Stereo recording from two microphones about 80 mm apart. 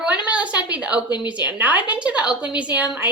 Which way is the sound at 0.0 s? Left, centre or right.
Centre.